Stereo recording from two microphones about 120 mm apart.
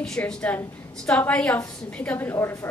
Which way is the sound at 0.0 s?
5° left (ahead or behind).